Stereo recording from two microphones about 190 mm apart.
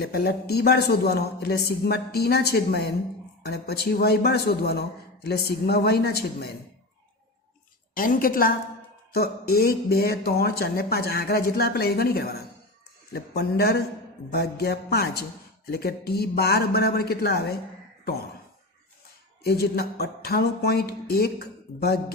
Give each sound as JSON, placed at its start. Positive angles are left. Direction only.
{"t": 0.0, "sound": "speech", "side_deg": 55}
{"t": 7.9, "sound": "a woman's voice", "side_deg": 50}
{"t": 19.5, "sound": "speech", "side_deg": 55}